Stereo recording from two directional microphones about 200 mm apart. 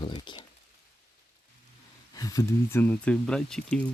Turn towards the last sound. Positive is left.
turn(degrees=5)  # may be behind; listen again after turning